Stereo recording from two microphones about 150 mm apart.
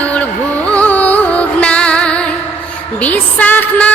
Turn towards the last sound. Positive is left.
turn(degrees=10)  # may be behind; listen again after turning